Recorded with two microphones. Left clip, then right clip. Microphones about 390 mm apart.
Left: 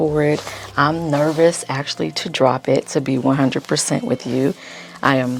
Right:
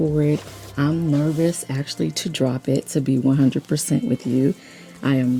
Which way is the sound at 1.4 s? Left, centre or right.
Left.